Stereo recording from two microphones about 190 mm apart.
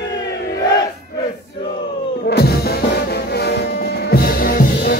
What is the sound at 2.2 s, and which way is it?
Music, 55° left (ahead or behind).